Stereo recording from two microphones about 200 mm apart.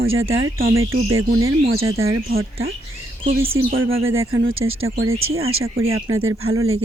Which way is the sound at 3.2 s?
45° right (ahead or behind).